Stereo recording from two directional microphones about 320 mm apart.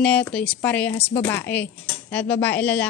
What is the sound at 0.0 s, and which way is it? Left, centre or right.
A man's voice, centre.